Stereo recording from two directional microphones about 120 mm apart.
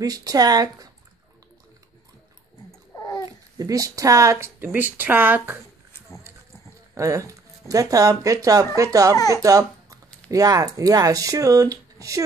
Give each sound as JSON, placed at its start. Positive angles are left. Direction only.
{"t": 0.0, "sound": "speech", "side_deg": -30}
{"t": 3.0, "sound": "babbling", "side_deg": 30}
{"t": 3.5, "sound": "speech", "side_deg": -30}
{"t": 5.9, "sound": "pig", "side_deg": 20}
{"t": 7.0, "sound": "a child's voice", "side_deg": -25}